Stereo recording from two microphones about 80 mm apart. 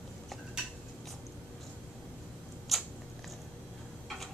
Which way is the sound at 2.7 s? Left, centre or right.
Centre.